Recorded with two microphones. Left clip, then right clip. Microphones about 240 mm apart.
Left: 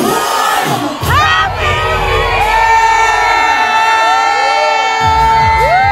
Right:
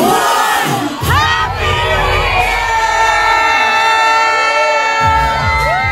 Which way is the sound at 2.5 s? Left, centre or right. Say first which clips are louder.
Left 5 dB; centre.